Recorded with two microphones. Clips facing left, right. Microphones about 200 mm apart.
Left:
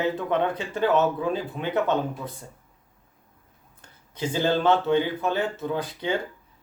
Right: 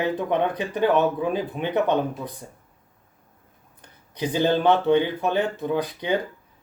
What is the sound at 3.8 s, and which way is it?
Speech, 15° right (ahead or behind).